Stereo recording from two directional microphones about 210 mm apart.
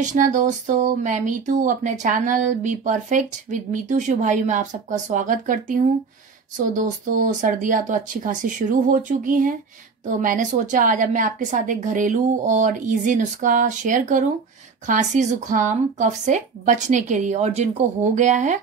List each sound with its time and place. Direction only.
0.0 s speech: 35° right (ahead or behind)